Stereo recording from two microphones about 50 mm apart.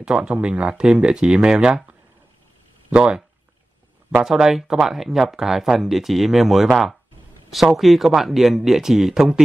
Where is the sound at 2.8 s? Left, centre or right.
Right.